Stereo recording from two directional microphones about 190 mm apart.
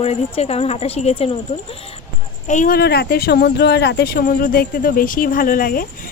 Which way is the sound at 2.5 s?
45° left (ahead or behind).